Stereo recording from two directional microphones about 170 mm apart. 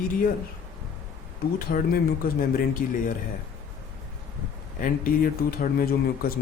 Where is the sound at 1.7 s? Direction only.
65° left (ahead or behind).